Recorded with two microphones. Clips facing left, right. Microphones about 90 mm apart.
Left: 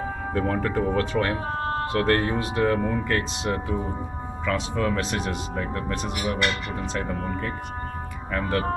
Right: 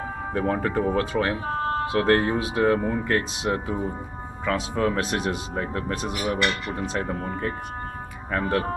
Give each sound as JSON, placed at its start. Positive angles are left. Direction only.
{"t": 0.3, "sound": "speech", "side_deg": -10}
{"t": 7.1, "sound": "speech", "side_deg": -25}